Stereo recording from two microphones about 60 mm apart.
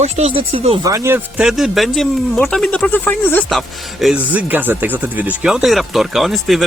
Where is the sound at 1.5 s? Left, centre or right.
Centre.